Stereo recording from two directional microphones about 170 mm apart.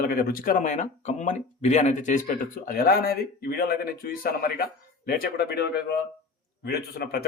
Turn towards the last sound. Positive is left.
turn(degrees=70)  # may be behind; listen again after turning